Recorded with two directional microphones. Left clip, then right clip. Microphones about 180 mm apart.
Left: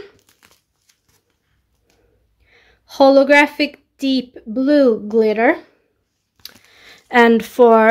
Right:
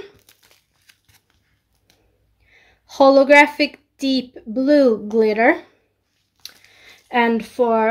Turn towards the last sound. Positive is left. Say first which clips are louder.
# left 7 dB
turn(degrees=50)  # may be behind; listen again after turning